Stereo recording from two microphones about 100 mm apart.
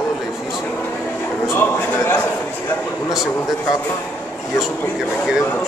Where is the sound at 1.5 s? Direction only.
25° left (ahead or behind).